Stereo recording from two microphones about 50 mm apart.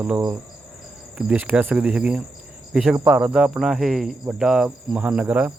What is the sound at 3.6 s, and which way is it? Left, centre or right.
Speech, centre.